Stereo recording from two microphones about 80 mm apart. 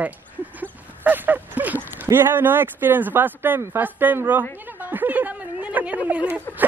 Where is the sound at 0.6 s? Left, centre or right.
Right.